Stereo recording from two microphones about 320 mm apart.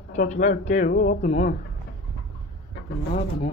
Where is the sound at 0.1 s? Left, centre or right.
Left.